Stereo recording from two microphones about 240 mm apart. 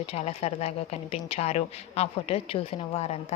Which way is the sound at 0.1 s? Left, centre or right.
Left.